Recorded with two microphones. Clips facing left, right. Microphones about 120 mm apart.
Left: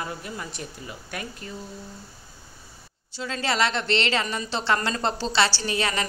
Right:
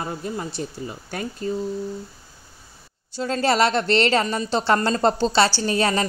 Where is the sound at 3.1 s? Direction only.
45° right (ahead or behind).